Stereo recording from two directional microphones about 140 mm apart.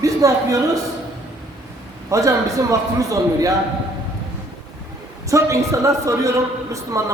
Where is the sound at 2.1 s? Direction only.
25° right (ahead or behind).